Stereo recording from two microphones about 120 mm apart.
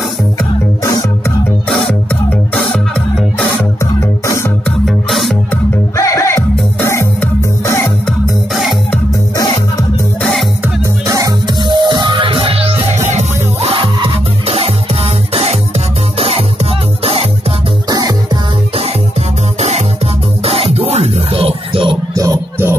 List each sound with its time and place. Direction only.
1.7 s music: 5° left (ahead or behind)
3.8 s music: 25° left (ahead or behind)
4.6 s music: centre (ahead or behind)
5.9 s music: 25° left (ahead or behind)
9.3 s music: 30° left (ahead or behind)
11.1 s music: 30° right (ahead or behind); by 13.0 s 55° right (ahead or behind)
13.1 s music: 65° right (ahead or behind)
13.7 s music: 50° right (ahead or behind)
17.8 s music: 35° right (ahead or behind)
19.6 s music: 60° right (ahead or behind)
22.1 s music: 30° right (ahead or behind)